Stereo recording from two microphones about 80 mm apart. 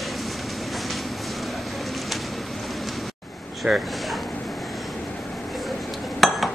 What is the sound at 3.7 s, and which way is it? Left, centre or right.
Speech, centre.